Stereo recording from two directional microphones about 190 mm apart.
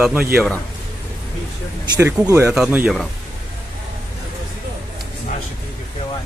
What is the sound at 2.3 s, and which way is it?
Speech, 10° right (ahead or behind).